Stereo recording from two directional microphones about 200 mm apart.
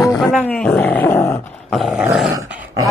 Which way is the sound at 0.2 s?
5° left (ahead or behind).